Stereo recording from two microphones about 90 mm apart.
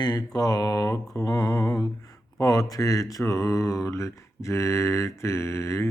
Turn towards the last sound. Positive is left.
turn(degrees=30)  # may be behind; listen again after turning